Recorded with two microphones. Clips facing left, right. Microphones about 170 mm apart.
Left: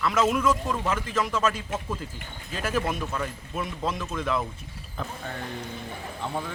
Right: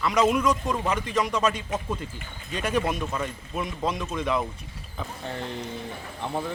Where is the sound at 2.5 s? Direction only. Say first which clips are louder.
Right 2 dB; centre (ahead or behind).